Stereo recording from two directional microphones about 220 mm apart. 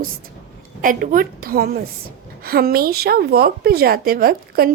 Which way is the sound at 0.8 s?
40° right (ahead or behind).